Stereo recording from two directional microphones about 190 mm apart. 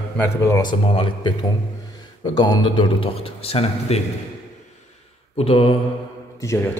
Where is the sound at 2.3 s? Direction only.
20° left (ahead or behind).